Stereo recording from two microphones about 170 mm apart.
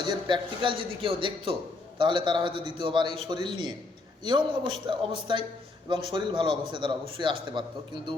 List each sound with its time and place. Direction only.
0.3 s a man's voice: 30° right (ahead or behind)